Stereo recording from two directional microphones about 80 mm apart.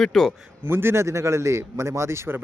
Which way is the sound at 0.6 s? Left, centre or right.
Right.